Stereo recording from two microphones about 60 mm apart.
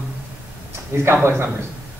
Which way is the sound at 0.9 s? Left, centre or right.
Right.